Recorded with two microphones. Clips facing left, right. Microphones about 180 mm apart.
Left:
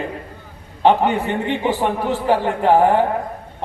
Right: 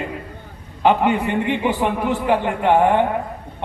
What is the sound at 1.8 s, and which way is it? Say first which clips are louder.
A man's voice: even; 35° left (ahead or behind).